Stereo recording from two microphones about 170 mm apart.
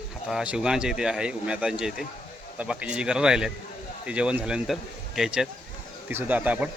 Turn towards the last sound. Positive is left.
turn(degrees=-10)  # may be behind; listen again after turning